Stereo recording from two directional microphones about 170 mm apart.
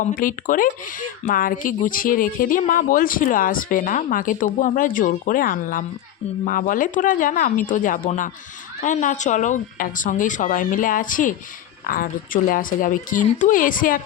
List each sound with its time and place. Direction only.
0.0 s speech: 55° left (ahead or behind)